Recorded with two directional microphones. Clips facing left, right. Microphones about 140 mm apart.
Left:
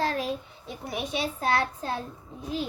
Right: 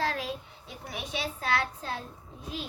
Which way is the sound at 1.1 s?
45° left (ahead or behind).